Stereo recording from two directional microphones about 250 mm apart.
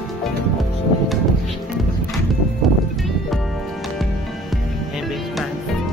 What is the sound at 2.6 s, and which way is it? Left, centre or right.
Music, centre.